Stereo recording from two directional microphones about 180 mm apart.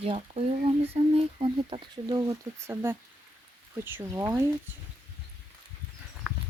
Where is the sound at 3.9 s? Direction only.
15° right (ahead or behind).